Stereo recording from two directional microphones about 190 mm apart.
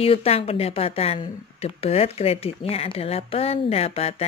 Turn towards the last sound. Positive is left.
turn(degrees=30)  # may be behind; listen again after turning